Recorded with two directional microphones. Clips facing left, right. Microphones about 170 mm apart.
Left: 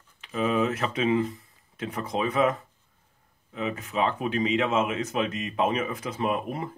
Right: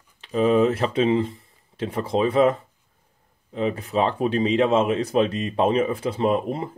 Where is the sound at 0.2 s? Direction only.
35° right (ahead or behind).